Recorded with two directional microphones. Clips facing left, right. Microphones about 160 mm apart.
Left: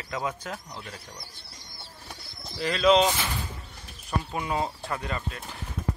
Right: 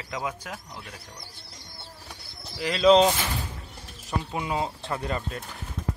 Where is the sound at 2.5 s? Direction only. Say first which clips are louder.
Even; 15° right (ahead or behind).